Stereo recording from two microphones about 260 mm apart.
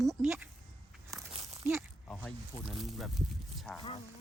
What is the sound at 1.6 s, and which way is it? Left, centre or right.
Speech, centre.